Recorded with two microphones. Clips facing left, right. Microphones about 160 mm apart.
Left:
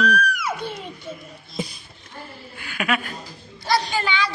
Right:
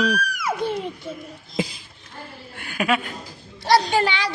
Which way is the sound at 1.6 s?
90° right.